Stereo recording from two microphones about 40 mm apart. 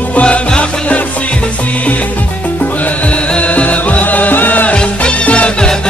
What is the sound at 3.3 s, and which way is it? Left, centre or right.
Music, left.